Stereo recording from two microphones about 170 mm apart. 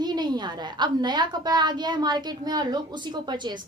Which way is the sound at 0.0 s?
25° right (ahead or behind).